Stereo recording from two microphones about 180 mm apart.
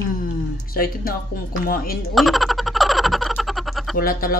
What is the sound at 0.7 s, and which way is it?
Speech, 55° left (ahead or behind).